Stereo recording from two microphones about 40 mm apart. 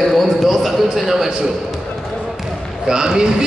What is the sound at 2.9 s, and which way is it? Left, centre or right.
Speech, centre.